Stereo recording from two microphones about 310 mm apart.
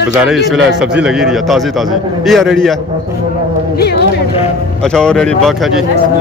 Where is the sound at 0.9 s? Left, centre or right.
Centre.